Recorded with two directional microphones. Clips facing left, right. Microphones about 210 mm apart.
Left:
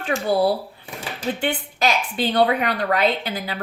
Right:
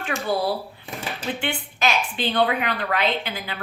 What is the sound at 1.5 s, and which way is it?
A woman's voice, 40° left (ahead or behind).